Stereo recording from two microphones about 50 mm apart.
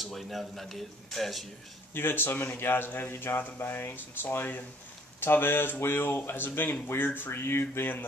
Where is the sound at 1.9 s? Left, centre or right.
Left.